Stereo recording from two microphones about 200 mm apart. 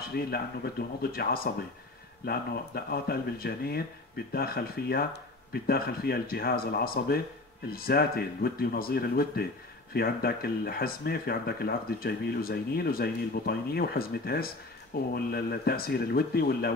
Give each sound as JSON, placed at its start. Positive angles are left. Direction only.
{"t": 0.1, "sound": "speech", "side_deg": 50}